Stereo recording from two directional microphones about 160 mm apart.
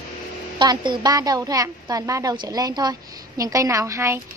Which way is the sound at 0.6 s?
30° right (ahead or behind).